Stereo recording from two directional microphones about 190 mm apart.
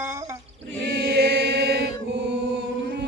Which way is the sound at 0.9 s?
60° right (ahead or behind).